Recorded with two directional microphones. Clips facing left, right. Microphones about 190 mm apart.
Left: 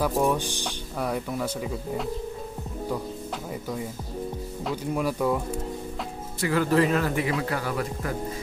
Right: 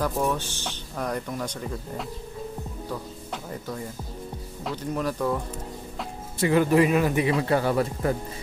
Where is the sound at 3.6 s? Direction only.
5° left (ahead or behind).